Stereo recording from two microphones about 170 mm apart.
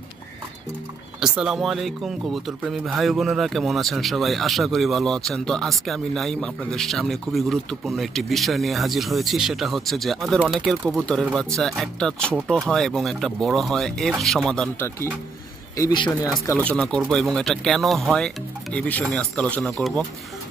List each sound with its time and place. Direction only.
1.2 s speech: 5° right (ahead or behind)
15.7 s speech: 25° left (ahead or behind)
16.4 s speech: 10° left (ahead or behind)